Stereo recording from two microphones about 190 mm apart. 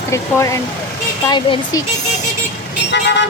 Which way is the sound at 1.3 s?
25° left (ahead or behind).